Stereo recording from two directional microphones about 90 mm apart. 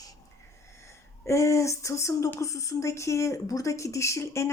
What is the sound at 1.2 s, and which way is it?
Speech, 35° left (ahead or behind).